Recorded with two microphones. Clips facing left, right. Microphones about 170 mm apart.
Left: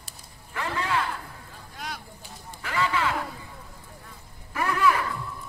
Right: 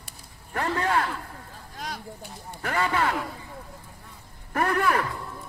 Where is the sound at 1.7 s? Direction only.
40° right (ahead or behind).